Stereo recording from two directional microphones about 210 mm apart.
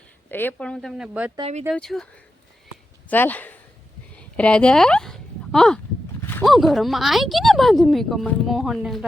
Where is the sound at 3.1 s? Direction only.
10° left (ahead or behind).